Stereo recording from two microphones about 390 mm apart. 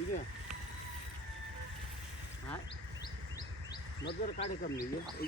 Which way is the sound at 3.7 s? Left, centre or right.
Centre.